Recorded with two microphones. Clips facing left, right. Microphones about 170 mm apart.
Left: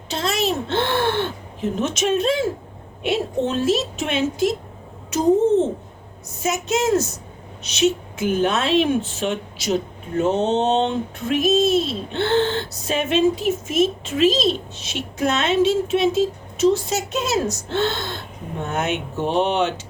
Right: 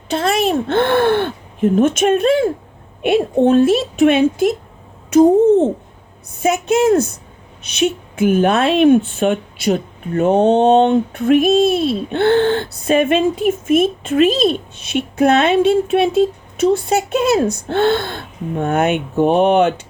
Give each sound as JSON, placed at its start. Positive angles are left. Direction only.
{"t": 0.1, "sound": "a woman's voice", "side_deg": -55}
{"t": 6.4, "sound": "a woman's voice", "side_deg": -55}